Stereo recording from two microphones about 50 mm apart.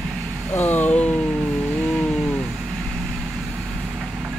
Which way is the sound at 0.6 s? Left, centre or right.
Left.